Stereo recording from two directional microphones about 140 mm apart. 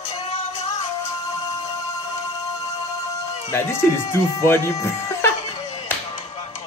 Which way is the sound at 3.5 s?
20° left (ahead or behind).